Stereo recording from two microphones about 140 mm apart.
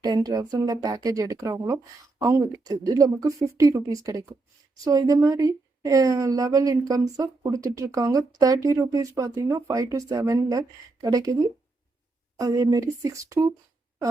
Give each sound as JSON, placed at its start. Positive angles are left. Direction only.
{"t": 0.0, "sound": "speech", "side_deg": -25}